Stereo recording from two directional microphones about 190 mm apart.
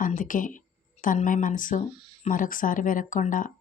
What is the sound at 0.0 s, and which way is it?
Speech, 45° left (ahead or behind).